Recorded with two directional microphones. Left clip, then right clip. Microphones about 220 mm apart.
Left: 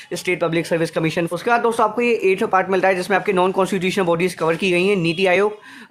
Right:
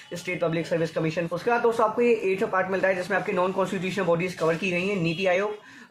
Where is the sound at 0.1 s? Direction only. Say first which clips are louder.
Left 7 dB; 50° left (ahead or behind).